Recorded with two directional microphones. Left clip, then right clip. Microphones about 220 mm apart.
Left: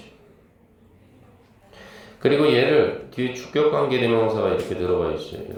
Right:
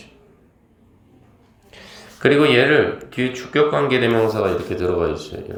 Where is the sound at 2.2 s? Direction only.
25° right (ahead or behind).